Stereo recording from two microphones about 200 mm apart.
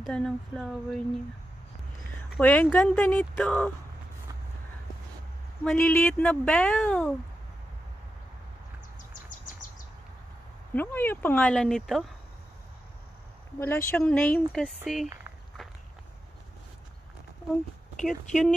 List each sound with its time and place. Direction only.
0.0 s speech: centre (ahead or behind)
2.4 s speech: 10° left (ahead or behind)
5.6 s speech: 5° left (ahead or behind)
9.1 s a sound: 40° left (ahead or behind)
10.7 s speech: 10° left (ahead or behind)
13.6 s speech: 10° left (ahead or behind)
17.9 s speech: 5° left (ahead or behind)